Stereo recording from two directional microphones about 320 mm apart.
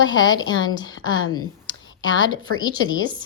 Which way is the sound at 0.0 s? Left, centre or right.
Left.